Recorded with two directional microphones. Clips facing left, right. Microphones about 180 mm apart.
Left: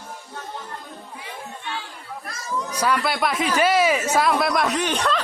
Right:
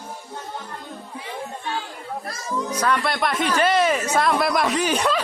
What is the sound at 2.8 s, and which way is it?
Speech, 5° left (ahead or behind).